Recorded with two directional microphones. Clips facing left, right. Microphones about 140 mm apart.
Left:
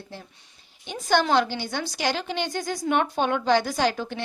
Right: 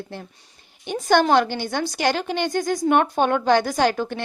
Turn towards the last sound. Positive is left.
turn(degrees=-50)  # may be behind; listen again after turning